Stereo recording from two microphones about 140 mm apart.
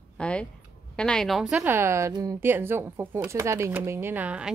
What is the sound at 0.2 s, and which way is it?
A woman's voice, 10° left (ahead or behind).